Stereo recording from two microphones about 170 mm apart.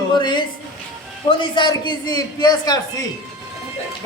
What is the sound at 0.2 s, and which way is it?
A woman's voice, 25° left (ahead or behind).